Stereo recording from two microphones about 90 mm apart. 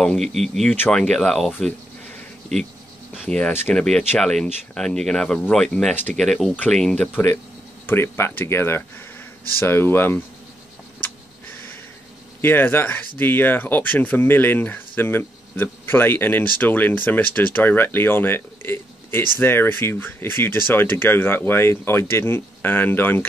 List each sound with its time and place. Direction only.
0.0 s speech: 5° left (ahead or behind)
0.7 s speech: 15° left (ahead or behind)
7.8 s speech: 25° left (ahead or behind)
12.4 s speech: 25° left (ahead or behind)